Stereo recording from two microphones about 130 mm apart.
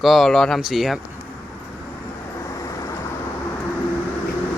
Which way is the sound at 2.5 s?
25° left (ahead or behind).